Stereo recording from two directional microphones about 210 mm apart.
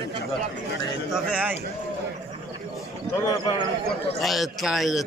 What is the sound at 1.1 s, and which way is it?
Speech, 5° right (ahead or behind).